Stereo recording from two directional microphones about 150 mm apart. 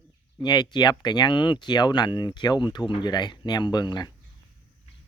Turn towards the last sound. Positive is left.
turn(degrees=30)  # may be behind; listen again after turning